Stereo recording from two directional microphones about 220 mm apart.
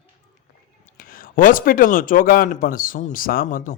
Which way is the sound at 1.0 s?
40° left (ahead or behind).